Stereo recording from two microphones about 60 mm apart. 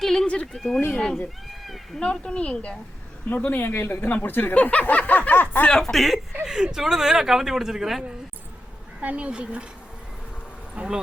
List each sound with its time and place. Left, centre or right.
0.0 s a sound: centre
0.5 s speech: centre
1.5 s a sound: centre
2.0 s a woman's voice: centre
3.2 s speech: left
5.6 s speech: centre
6.4 s speech: centre
9.0 s speech: right
10.8 s speech: centre